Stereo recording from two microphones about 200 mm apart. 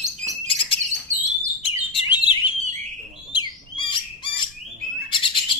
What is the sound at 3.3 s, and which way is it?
Bird, 25° left (ahead or behind).